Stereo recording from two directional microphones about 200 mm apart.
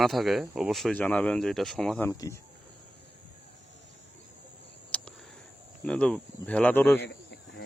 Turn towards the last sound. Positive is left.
turn(degrees=60)  # may be behind; listen again after turning